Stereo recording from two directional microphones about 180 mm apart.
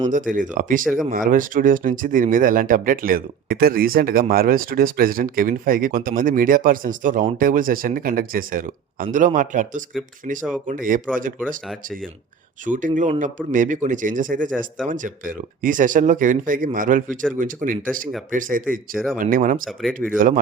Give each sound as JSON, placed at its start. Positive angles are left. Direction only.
{"t": 0.3, "sound": "speech", "side_deg": -45}
{"t": 12.6, "sound": "speech", "side_deg": -45}